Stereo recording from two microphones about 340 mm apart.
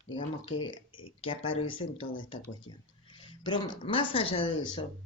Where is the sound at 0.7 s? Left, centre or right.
Left.